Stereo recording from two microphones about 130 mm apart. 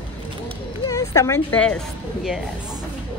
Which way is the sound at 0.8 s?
25° left (ahead or behind).